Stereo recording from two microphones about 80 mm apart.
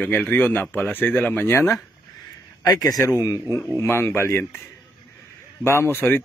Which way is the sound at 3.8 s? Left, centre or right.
Left.